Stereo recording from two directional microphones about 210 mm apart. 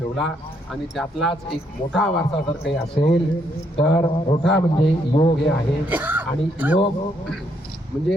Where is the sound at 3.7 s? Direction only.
25° left (ahead or behind).